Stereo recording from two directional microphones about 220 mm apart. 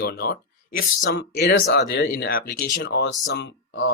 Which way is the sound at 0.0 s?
45° left (ahead or behind).